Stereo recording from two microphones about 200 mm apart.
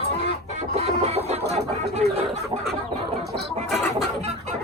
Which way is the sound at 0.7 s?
30° right (ahead or behind).